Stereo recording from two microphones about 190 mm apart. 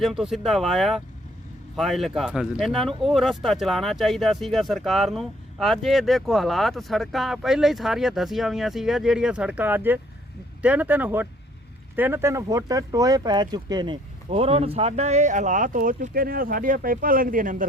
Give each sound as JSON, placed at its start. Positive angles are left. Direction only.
{"t": 0.0, "sound": "speech", "side_deg": 0}